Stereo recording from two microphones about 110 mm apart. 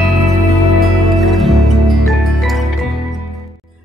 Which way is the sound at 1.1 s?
Centre (ahead or behind).